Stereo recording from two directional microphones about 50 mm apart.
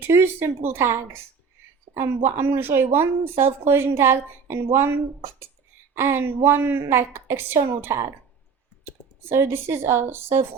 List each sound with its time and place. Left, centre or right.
0.1 s speech: right
9.3 s a woman's voice: right